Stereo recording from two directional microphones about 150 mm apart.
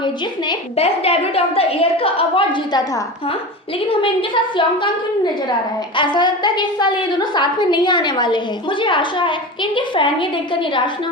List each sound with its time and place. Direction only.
0.8 s a woman's voice: 40° left (ahead or behind)
3.8 s a woman's voice: 35° left (ahead or behind)